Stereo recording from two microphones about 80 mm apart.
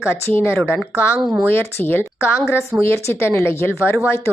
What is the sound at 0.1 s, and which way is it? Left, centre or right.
A woman's voice, left.